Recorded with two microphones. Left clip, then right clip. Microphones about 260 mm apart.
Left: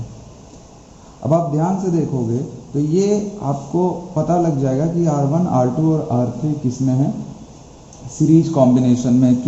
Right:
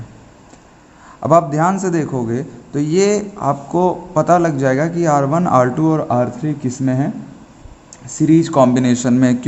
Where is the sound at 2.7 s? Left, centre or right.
Right.